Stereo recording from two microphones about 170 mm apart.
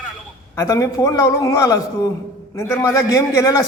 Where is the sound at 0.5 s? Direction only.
20° left (ahead or behind).